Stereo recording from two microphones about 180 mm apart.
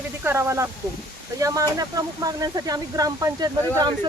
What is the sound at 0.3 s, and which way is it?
Speech, 15° right (ahead or behind).